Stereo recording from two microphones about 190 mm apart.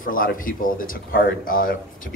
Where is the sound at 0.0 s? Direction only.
45° left (ahead or behind).